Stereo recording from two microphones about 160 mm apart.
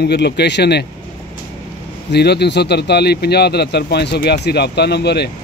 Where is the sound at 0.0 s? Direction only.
90° left.